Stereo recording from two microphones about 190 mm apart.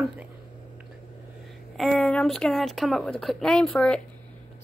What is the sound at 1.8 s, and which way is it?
Speech, centre (ahead or behind).